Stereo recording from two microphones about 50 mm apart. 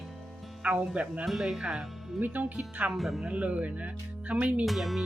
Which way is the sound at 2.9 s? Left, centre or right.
Centre.